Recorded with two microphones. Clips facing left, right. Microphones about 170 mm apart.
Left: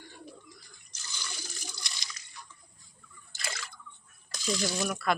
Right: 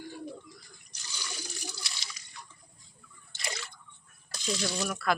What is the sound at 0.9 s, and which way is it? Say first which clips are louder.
Water: even; 10° right (ahead or behind).